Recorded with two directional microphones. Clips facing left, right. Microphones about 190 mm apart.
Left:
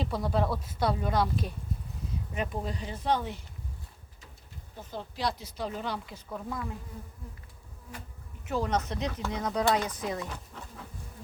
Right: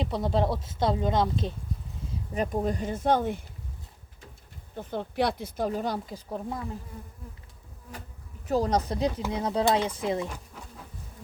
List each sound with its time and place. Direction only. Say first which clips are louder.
0.0 s speech: right 3 dB; 25° right (ahead or behind)
2.3 s speech: right 7 dB; 40° right (ahead or behind)
4.8 s speech: right 6 dB; 60° right (ahead or behind); by 6.1 s 40° right (ahead or behind)
6.2 s speech: right 2 dB; 30° right (ahead or behind)
8.4 s speech: right 4 dB; 35° right (ahead or behind)
10.2 s speech: right 2 dB; 10° right (ahead or behind)